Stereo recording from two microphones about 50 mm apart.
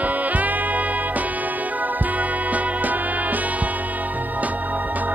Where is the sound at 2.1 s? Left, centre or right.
Right.